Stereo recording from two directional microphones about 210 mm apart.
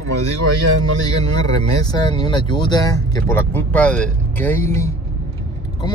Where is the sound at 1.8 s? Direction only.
20° left (ahead or behind).